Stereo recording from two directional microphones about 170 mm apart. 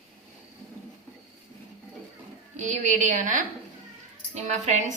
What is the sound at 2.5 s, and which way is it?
A woman's voice, 45° right (ahead or behind).